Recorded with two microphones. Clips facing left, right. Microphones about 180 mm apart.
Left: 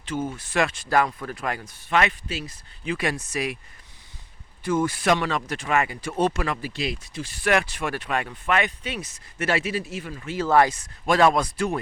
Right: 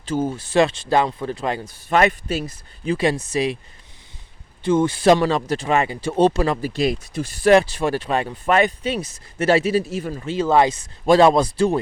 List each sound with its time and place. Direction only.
0.0 s speech: 35° right (ahead or behind)
2.8 s speech: 30° right (ahead or behind)
4.6 s speech: 30° right (ahead or behind)